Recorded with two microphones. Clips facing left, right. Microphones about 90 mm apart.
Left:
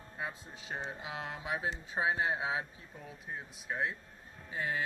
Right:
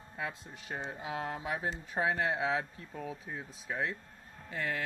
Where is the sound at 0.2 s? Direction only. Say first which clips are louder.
Right 2 dB; 85° right.